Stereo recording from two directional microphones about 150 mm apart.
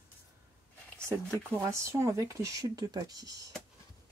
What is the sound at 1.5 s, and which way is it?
Speech, 20° right (ahead or behind).